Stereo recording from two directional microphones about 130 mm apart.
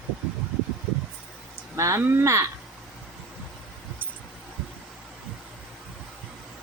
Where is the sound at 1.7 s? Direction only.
25° right (ahead or behind).